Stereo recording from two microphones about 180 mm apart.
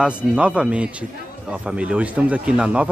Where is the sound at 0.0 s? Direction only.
5° right (ahead or behind).